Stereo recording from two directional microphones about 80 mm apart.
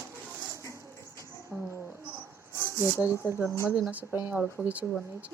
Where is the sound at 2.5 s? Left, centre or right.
Left.